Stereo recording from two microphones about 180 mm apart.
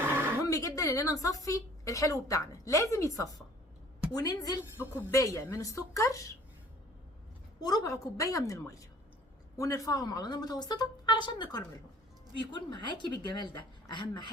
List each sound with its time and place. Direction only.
0.4 s a woman's voice: 20° left (ahead or behind)
7.6 s a woman's voice: 20° left (ahead or behind)